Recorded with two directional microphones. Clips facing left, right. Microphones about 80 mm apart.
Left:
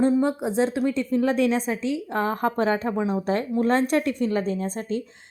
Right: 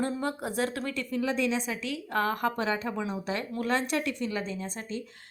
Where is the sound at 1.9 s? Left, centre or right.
Left.